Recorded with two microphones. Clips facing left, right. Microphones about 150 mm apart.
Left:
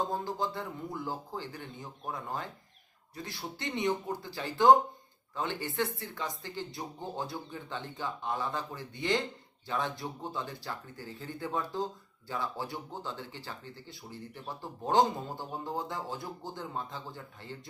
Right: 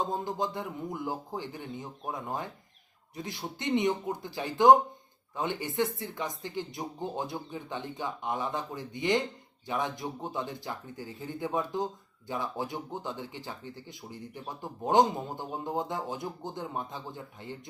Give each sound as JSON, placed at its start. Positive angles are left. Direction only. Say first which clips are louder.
{"t": 0.0, "sound": "speech", "louder": "right 1 dB", "side_deg": -20}